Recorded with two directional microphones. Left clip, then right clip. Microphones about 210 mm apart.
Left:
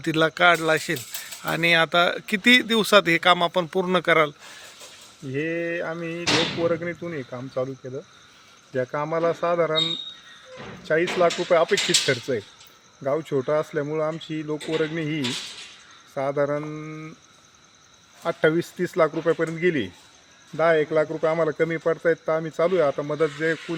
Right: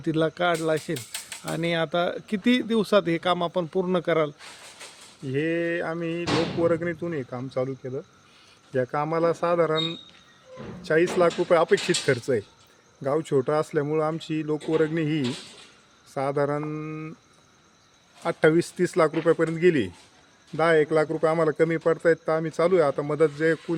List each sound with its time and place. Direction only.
0.0 s speech: centre (ahead or behind)
5.3 s a man's voice: 20° right (ahead or behind)
8.7 s a man's voice: 20° right (ahead or behind)
18.2 s a man's voice: 20° right (ahead or behind)